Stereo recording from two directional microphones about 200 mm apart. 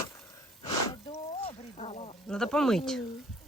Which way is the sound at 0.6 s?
25° left (ahead or behind).